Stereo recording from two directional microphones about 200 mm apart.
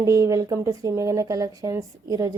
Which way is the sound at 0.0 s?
15° right (ahead or behind).